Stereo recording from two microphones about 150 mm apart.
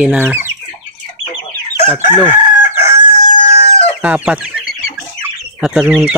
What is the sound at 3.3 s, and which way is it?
Chicken, 35° left (ahead or behind).